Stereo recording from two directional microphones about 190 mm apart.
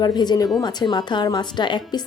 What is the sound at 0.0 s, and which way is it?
A woman's voice, 20° left (ahead or behind).